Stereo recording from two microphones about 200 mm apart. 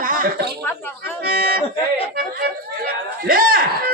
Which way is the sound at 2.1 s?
45° right (ahead or behind).